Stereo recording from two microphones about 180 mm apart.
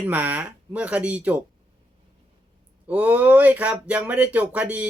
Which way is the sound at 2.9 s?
10° right (ahead or behind).